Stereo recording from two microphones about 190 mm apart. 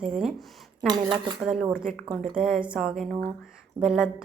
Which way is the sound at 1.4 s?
5° right (ahead or behind).